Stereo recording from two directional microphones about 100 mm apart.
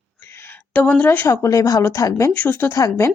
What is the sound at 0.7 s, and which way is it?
Speech, 15° left (ahead or behind).